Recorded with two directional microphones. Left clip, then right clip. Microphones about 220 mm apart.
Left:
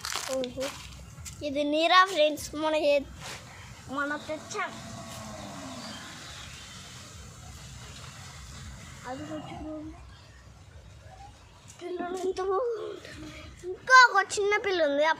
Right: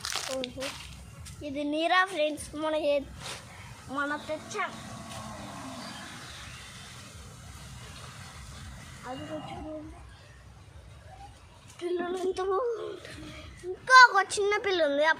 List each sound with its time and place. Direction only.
0.0 s crumpling: 10° left (ahead or behind)
1.2 s speech: 35° left (ahead or behind)
3.9 s a child's voice: 10° left (ahead or behind)
9.1 s a sound: centre (ahead or behind)
11.8 s female singing: 15° right (ahead or behind)
12.2 s a sound: 5° left (ahead or behind)
13.8 s a child's voice: 10° left (ahead or behind)